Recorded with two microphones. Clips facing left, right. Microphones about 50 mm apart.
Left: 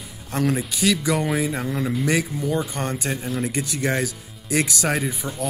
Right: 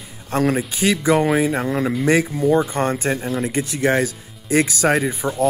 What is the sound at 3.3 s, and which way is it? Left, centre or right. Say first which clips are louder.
Speech: right 4 dB; centre.